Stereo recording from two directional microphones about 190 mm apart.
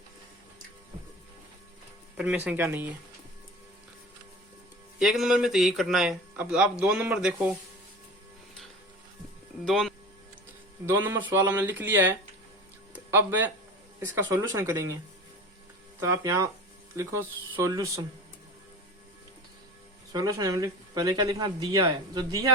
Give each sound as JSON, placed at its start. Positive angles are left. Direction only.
{"t": 2.1, "sound": "speech", "side_deg": -5}
{"t": 4.9, "sound": "speech", "side_deg": 0}
{"t": 9.6, "sound": "speech", "side_deg": 0}
{"t": 10.8, "sound": "speech", "side_deg": -15}
{"t": 16.0, "sound": "speech", "side_deg": -15}
{"t": 20.1, "sound": "speech", "side_deg": -20}